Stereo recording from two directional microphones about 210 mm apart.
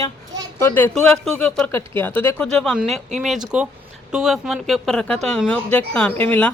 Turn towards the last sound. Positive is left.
turn(degrees=10)  # may be behind; listen again after turning